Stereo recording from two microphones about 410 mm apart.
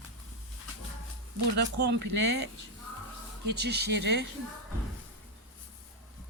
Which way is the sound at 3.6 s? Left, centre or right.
Right.